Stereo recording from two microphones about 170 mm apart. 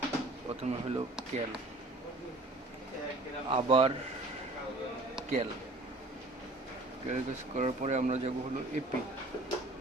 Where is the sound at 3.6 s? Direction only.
35° right (ahead or behind).